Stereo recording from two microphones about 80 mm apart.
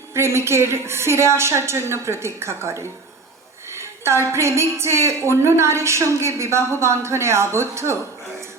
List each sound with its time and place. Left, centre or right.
0.1 s a woman's voice: right
3.7 s a sound: right
4.3 s a woman's voice: right